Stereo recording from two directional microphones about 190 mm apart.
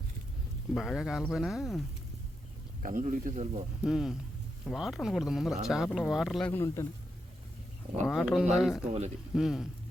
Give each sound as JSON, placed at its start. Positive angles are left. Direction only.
{"t": 0.7, "sound": "speech", "side_deg": 0}
{"t": 2.8, "sound": "speech", "side_deg": -45}
{"t": 3.8, "sound": "speech", "side_deg": 0}
{"t": 6.5, "sound": "a man's voice", "side_deg": 15}
{"t": 8.0, "sound": "speech", "side_deg": 0}
{"t": 8.9, "sound": "speech", "side_deg": -35}
{"t": 9.3, "sound": "speech", "side_deg": 0}